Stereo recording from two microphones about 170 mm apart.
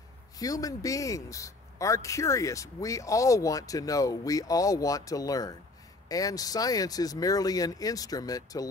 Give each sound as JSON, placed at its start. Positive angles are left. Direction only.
{"t": 0.4, "sound": "a man's voice", "side_deg": 20}